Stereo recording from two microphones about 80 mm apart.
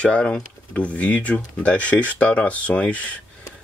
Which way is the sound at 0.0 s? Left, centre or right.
Centre.